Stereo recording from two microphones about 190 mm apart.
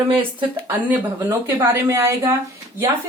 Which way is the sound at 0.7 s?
10° right (ahead or behind).